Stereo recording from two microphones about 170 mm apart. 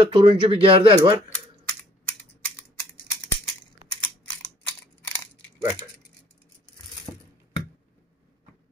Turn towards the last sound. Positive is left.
turn(degrees=20)  # may be behind; listen again after turning